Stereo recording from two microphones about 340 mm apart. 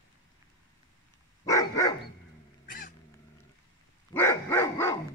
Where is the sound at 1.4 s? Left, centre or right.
Centre.